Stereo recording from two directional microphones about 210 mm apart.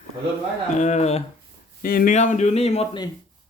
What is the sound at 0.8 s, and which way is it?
Speech, 35° left (ahead or behind).